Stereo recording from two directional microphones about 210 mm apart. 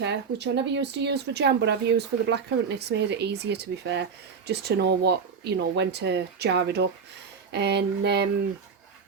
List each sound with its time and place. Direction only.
0.0 s speech: 55° right (ahead or behind)